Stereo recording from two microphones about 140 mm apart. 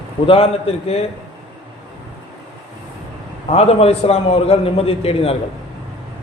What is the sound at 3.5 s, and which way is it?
A man's voice, 50° left (ahead or behind).